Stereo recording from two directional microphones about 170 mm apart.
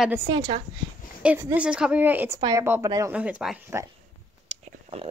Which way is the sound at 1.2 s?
10° right (ahead or behind).